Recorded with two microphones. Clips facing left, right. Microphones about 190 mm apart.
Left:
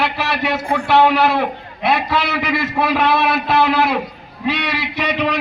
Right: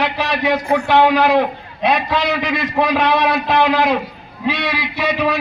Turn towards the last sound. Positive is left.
turn(degrees=-10)  # may be behind; listen again after turning